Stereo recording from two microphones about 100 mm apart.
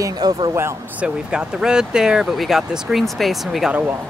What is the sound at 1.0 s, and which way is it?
Speech, 10° right (ahead or behind).